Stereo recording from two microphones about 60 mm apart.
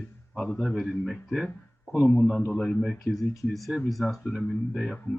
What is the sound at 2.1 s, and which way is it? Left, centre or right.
Speech, centre.